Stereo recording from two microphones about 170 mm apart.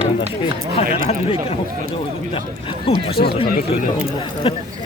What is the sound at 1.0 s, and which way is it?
Speech, 35° left (ahead or behind).